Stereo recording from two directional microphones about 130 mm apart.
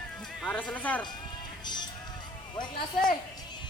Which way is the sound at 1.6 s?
35° left (ahead or behind).